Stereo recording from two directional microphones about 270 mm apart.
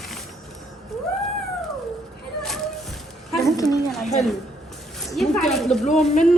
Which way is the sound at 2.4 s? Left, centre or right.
Centre.